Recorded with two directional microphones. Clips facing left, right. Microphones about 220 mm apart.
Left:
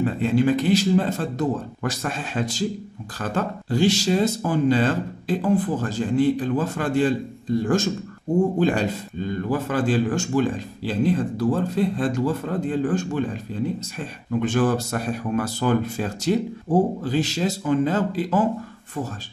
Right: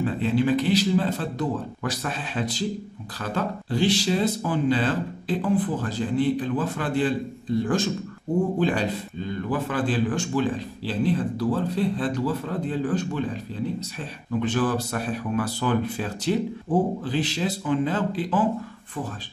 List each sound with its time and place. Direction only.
0.0 s a man's voice: 45° left (ahead or behind)
14.6 s a man's voice: 45° left (ahead or behind)